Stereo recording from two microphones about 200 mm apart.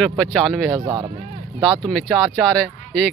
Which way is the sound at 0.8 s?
20° right (ahead or behind).